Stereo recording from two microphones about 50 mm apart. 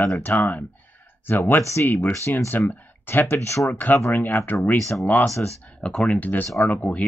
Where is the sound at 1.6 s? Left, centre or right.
Left.